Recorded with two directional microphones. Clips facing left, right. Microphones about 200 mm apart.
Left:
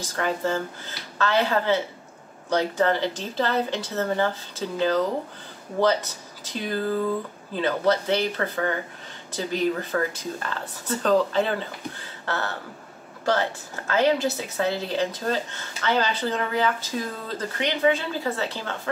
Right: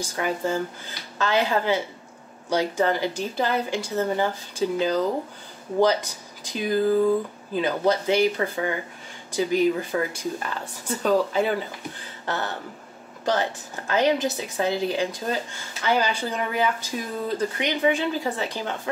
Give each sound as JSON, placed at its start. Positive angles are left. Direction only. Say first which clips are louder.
{"t": 0.0, "sound": "speech", "louder": "even", "side_deg": -10}